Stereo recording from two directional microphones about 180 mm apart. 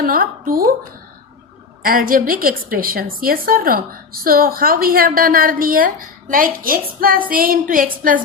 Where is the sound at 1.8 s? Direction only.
50° right (ahead or behind).